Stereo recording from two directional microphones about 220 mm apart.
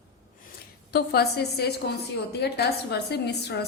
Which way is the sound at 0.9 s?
45° left (ahead or behind).